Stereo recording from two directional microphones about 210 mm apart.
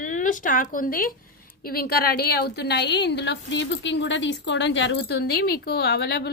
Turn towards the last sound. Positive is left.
turn(degrees=50)  # may be behind; listen again after turning